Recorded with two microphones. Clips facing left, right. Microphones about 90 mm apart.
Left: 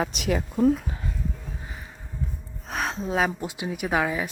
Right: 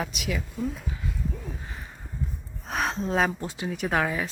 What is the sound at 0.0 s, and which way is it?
Speech, 40° left (ahead or behind).